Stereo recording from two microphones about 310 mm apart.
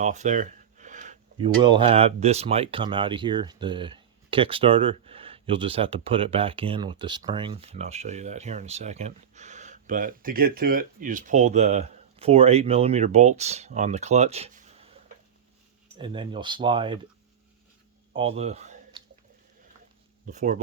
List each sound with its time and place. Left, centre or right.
0.0 s speech: right
16.0 s speech: centre
18.1 s a sound: centre
20.2 s speech: right